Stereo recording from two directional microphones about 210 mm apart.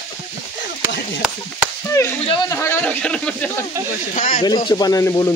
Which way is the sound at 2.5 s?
10° left (ahead or behind).